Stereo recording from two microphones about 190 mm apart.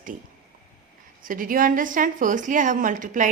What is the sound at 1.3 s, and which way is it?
A woman's voice, 45° right (ahead or behind).